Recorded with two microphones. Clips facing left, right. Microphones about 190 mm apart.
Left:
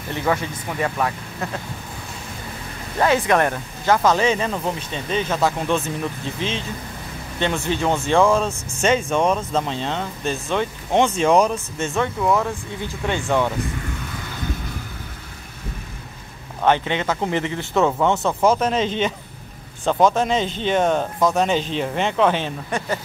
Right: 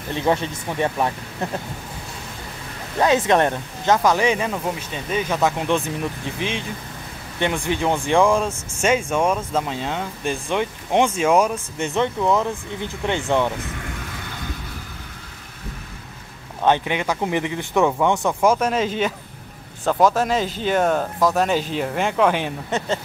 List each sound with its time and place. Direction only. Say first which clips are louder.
0.1 s speech: right 2 dB; 25° right (ahead or behind)
3.0 s speech: right 1 dB; 20° right (ahead or behind)
16.6 s speech: even; 15° right (ahead or behind)
22.7 s speech: right 2 dB; 25° right (ahead or behind)